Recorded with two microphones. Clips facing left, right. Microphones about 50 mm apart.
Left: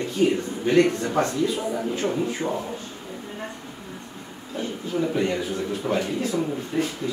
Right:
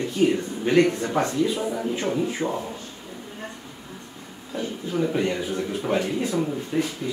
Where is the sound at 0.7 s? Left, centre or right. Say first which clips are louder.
Even; right.